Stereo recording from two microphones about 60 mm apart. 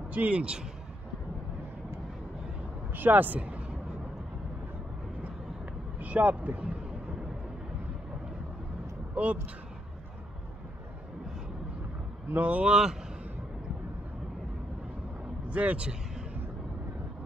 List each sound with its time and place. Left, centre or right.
0.1 s a man's voice: right
2.9 s speech: right
5.9 s speech: right
9.1 s speech: right
12.3 s a man's voice: right
15.5 s a man's voice: right